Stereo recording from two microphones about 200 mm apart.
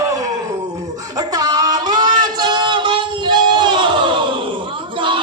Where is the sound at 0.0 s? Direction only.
15° right (ahead or behind).